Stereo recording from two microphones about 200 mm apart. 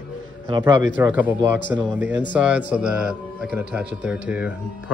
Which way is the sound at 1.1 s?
10° right (ahead or behind).